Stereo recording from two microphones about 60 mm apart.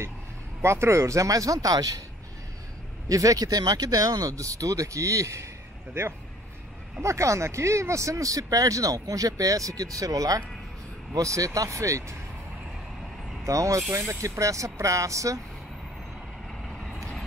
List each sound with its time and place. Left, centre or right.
0.6 s speech: right
3.1 s speech: right
7.0 s speech: right
11.1 s speech: right
13.4 s speech: right